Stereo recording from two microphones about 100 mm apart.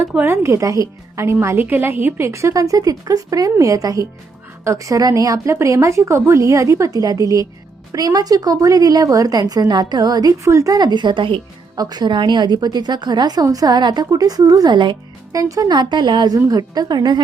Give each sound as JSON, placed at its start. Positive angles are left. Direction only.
{"t": 0.1, "sound": "speech", "side_deg": -15}
{"t": 0.4, "sound": "a woman's voice", "side_deg": -30}
{"t": 11.8, "sound": "a woman's voice", "side_deg": -45}
{"t": 15.3, "sound": "a woman's voice", "side_deg": -40}